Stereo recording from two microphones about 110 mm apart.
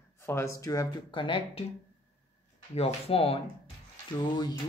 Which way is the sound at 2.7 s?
65° left (ahead or behind).